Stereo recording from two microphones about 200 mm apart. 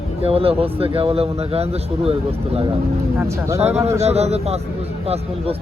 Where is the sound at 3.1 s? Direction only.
15° right (ahead or behind).